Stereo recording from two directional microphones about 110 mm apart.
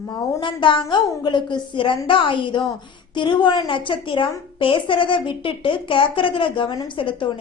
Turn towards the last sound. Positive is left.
turn(degrees=50)  # may be behind; listen again after turning